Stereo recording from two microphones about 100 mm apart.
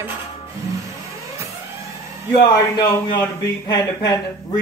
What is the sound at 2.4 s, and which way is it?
Speech, 40° left (ahead or behind).